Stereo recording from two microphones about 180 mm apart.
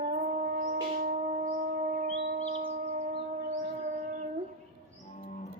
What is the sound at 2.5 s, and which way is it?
Shofar, 35° right (ahead or behind).